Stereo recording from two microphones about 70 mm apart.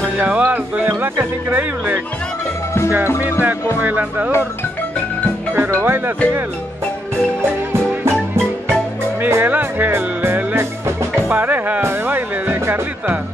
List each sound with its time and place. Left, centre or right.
0.2 s music: right
1.5 s speech: right
3.2 s speech: right
5.9 s music: right
9.2 s music: right
11.2 s speech: right